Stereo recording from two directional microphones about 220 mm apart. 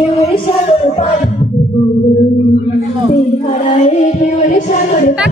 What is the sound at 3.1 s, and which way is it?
Female singing, 35° left (ahead or behind).